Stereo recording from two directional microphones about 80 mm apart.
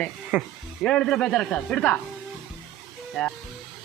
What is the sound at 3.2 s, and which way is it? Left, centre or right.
Speech, centre.